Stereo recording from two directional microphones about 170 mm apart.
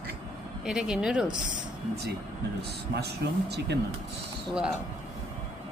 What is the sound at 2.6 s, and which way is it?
Speech, 70° right (ahead or behind).